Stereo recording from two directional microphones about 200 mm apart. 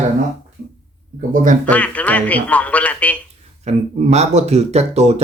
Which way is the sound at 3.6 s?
35° right (ahead or behind).